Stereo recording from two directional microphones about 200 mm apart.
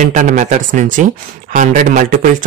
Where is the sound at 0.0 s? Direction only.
40° right (ahead or behind).